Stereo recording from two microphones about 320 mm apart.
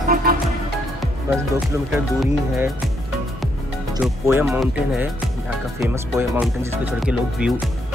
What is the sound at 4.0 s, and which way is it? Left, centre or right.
Speech, centre.